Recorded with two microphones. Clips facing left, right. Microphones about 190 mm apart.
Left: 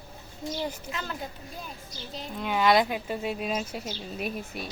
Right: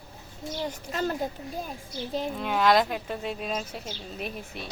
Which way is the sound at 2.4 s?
Centre (ahead or behind).